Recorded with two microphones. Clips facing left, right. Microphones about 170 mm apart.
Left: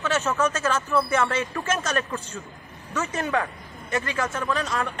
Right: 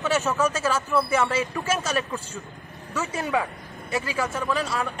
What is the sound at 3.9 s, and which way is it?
Speech, centre (ahead or behind).